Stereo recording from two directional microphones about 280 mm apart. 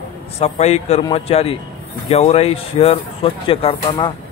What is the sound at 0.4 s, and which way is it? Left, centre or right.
Speech, left.